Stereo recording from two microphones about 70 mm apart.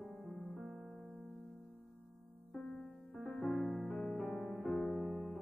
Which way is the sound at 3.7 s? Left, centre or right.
Left.